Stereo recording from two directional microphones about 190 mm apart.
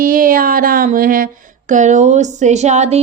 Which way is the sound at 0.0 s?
45° right (ahead or behind).